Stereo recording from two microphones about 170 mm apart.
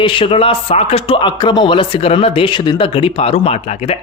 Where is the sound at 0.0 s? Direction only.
30° left (ahead or behind).